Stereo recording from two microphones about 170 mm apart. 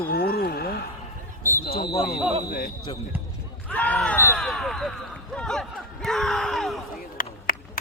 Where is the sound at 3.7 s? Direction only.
10° left (ahead or behind).